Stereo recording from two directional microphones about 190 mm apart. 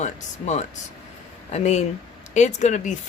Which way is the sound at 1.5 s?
35° left (ahead or behind).